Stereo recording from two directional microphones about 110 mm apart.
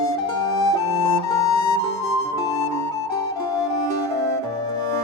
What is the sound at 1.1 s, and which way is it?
Music, 35° left (ahead or behind).